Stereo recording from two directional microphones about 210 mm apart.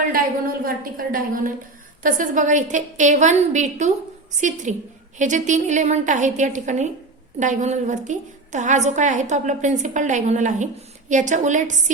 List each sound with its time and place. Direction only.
0.1 s a woman's voice: 45° right (ahead or behind)